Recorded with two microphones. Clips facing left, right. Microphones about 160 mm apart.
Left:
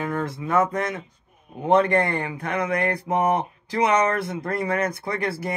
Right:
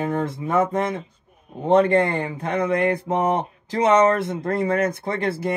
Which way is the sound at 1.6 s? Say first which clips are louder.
Right 2 dB; 25° right (ahead or behind).